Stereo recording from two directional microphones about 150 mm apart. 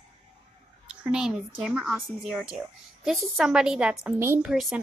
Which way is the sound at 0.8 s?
5° right (ahead or behind).